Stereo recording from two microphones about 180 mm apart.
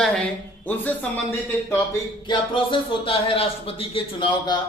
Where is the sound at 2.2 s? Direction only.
30° left (ahead or behind).